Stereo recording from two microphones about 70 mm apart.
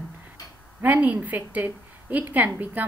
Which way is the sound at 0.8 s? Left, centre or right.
Right.